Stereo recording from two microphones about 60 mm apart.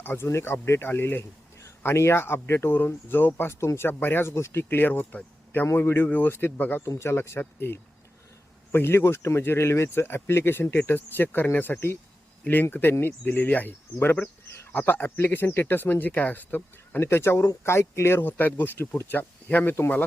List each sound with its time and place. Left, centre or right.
0.0 s speech: left
0.3 s speech: left
6.8 s speech: left
17.0 s speech: left
18.3 s speech: left